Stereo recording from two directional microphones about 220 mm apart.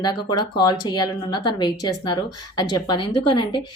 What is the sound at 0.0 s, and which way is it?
A woman's voice, 20° left (ahead or behind).